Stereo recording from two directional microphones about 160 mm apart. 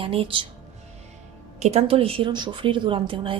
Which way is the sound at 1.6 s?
40° right (ahead or behind).